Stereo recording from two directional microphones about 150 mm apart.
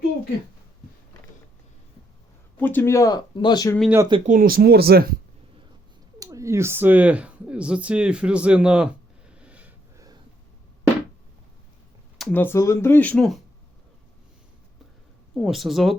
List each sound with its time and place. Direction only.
2.6 s speech: 10° left (ahead or behind)
3.8 s speech: 15° right (ahead or behind)
4.3 s speech: 75° right (ahead or behind); by 5.0 s 90° right
6.1 s speech: 20° right (ahead or behind)
12.3 s speech: 15° left (ahead or behind)
15.4 s speech: centre (ahead or behind)